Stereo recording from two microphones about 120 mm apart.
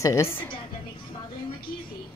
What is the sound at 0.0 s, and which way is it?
Speech, 25° left (ahead or behind).